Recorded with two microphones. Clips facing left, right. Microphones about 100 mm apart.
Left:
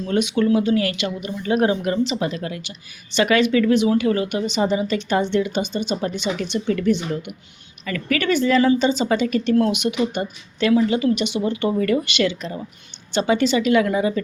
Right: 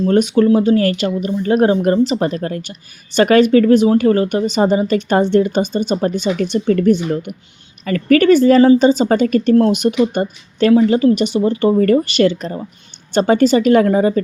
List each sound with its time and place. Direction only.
0.0 s a woman's voice: 40° right (ahead or behind)